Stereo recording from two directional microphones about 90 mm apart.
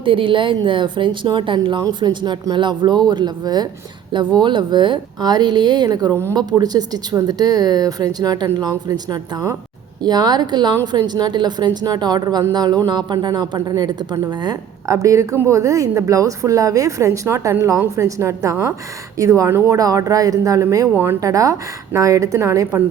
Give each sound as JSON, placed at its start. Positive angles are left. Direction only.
{"t": 0.0, "sound": "speech", "side_deg": -70}
{"t": 14.8, "sound": "a woman's voice", "side_deg": -35}
{"t": 19.6, "sound": "a woman's voice", "side_deg": -40}
{"t": 20.9, "sound": "speech", "side_deg": -25}
{"t": 21.2, "sound": "a woman's voice", "side_deg": -40}